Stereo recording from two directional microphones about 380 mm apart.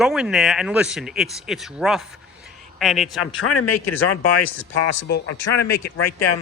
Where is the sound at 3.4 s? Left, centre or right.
Left.